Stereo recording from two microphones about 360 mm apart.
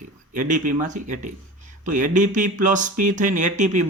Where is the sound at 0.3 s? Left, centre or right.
Right.